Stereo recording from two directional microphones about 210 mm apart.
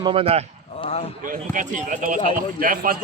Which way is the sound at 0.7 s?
25° left (ahead or behind).